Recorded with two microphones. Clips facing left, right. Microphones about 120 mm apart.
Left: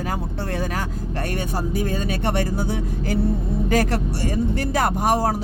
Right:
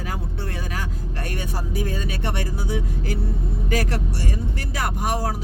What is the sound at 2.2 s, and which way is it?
Speech, 40° left (ahead or behind).